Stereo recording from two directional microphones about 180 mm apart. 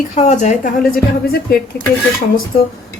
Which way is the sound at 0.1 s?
40° left (ahead or behind).